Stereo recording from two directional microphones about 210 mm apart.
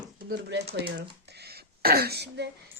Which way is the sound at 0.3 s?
50° right (ahead or behind).